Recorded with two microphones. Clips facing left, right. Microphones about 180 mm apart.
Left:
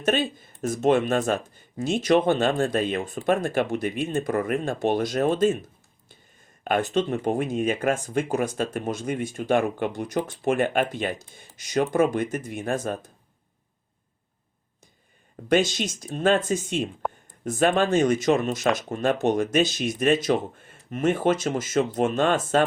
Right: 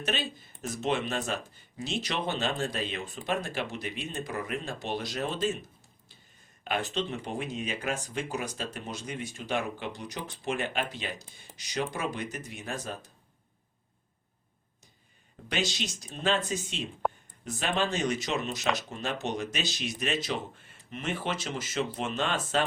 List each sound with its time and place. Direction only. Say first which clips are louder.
0.0 s speech: left 9 dB; 50° left (ahead or behind)
6.7 s speech: left 8 dB; 50° left (ahead or behind)
15.4 s speech: left 11 dB; 50° left (ahead or behind)